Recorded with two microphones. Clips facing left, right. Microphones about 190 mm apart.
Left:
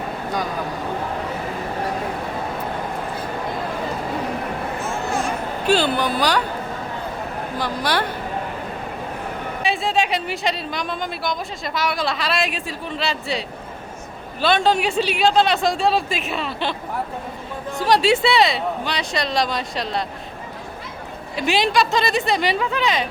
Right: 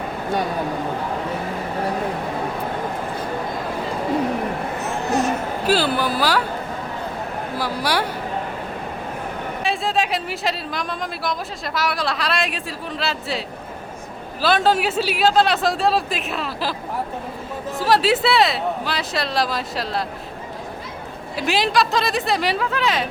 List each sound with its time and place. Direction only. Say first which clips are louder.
4.8 s a sound: right 4 dB; 20° right (ahead or behind)
5.6 s a woman's voice: left 1 dB; 5° right (ahead or behind)
7.6 s speech: even; 10° right (ahead or behind)
9.6 s a woman's voice: left 1 dB; centre (ahead or behind)
14.4 s a woman's voice: even; 5° right (ahead or behind)
21.3 s a woman's voice: left 1 dB; centre (ahead or behind)